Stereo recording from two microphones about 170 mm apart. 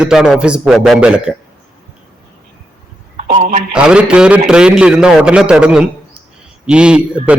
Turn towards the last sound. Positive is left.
turn(degrees=-5)  # may be behind; listen again after turning